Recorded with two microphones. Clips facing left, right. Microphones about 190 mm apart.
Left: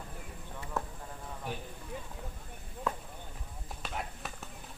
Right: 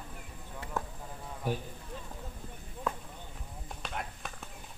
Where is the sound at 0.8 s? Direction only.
Centre (ahead or behind).